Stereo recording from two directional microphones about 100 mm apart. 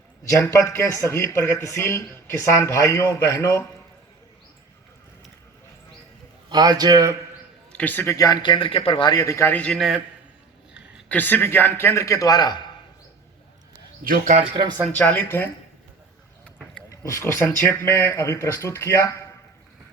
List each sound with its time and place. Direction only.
0.3 s a man's voice: 30° left (ahead or behind)
6.5 s a man's voice: 40° right (ahead or behind)
7.7 s a man's voice: 15° left (ahead or behind)
8.0 s a man's voice: 35° left (ahead or behind)
8.4 s speech: 55° left (ahead or behind)
9.0 s a man's voice: 35° left (ahead or behind)
9.5 s a man's voice: 15° left (ahead or behind)
9.7 s a man's voice: 5° right (ahead or behind)
11.1 s speech: 20° left (ahead or behind); by 12.5 s 40° left (ahead or behind)
14.5 s speech: 45° right (ahead or behind)
14.9 s speech: 20° left (ahead or behind)
16.9 s speech: 30° left (ahead or behind)